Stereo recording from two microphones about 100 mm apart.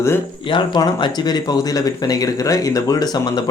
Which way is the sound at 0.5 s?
45° left (ahead or behind).